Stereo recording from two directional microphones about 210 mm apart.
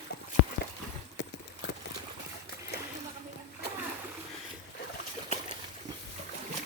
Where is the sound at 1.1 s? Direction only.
55° left (ahead or behind).